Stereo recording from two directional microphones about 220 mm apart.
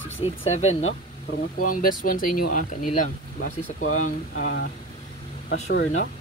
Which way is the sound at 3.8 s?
70° left (ahead or behind).